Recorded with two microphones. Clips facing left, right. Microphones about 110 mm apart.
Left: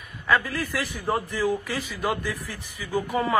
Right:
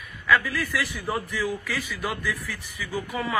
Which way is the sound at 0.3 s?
15° left (ahead or behind).